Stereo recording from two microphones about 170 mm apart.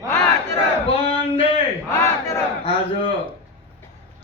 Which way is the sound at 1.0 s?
35° left (ahead or behind).